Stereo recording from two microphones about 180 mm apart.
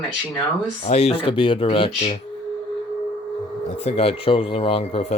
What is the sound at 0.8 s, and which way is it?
Speech, 35° left (ahead or behind).